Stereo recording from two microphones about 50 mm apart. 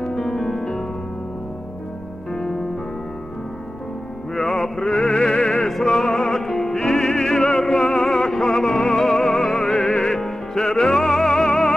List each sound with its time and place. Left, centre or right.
0.0 s music: centre
2.3 s music: centre
4.4 s music: centre